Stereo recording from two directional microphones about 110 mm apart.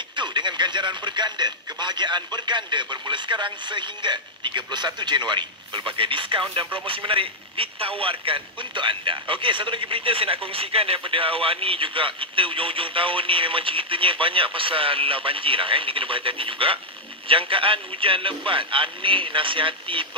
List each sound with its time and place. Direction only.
0.1 s a man's voice: 45° right (ahead or behind)